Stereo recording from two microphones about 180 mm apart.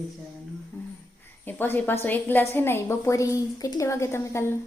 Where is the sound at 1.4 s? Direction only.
10° left (ahead or behind).